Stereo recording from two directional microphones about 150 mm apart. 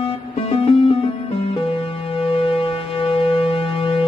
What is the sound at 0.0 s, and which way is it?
Music, 35° left (ahead or behind).